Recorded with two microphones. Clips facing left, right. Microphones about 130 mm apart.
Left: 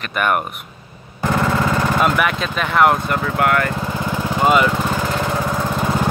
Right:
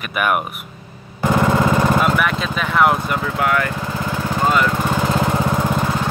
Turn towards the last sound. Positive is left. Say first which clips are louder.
# left 1 dB
turn(degrees=0)  # may be behind; listen again after turning